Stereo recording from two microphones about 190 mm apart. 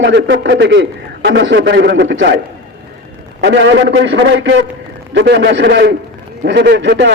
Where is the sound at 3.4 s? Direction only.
70° right (ahead or behind).